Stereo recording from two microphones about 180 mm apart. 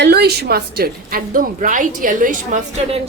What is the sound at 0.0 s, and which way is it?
A woman's voice, 65° right (ahead or behind).